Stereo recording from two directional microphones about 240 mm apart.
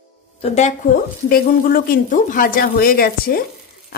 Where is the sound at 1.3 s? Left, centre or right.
Left.